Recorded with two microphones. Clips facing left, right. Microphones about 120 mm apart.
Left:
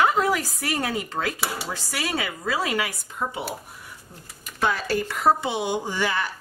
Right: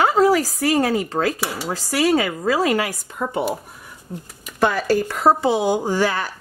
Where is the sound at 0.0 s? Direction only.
35° right (ahead or behind).